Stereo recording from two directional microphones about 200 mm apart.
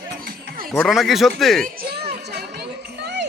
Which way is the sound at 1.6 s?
50° right (ahead or behind).